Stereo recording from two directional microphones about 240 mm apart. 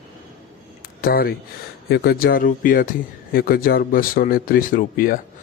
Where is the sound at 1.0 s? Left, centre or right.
Left.